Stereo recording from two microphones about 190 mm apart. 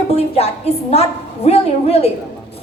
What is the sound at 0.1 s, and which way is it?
A woman's voice, 30° left (ahead or behind).